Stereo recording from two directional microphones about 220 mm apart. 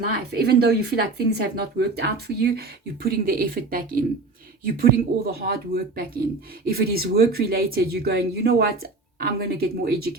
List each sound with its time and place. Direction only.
0.0 s speech: 45° right (ahead or behind)